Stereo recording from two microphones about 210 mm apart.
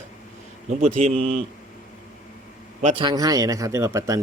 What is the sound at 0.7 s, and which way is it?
Speech, 35° right (ahead or behind).